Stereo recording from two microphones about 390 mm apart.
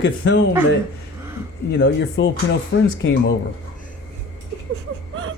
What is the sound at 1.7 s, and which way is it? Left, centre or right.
Speech, left.